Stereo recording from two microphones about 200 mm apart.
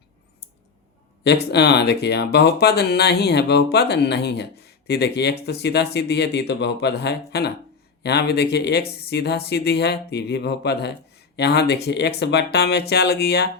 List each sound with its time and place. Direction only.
1.2 s speech: 55° left (ahead or behind)